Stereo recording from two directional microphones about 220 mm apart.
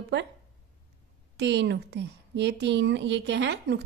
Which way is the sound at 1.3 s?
50° right (ahead or behind).